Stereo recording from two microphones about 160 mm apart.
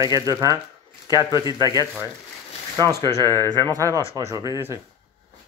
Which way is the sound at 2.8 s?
25° right (ahead or behind).